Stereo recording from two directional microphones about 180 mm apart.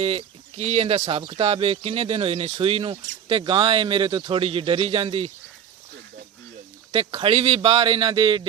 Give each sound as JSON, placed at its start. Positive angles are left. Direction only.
{"t": 0.0, "sound": "speech", "side_deg": -30}
{"t": 6.9, "sound": "speech", "side_deg": -35}